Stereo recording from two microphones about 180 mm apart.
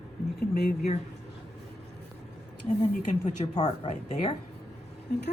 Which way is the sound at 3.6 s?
35° left (ahead or behind).